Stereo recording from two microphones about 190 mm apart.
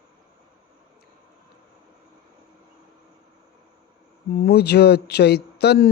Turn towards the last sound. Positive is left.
turn(degrees=60)  # may be behind; listen again after turning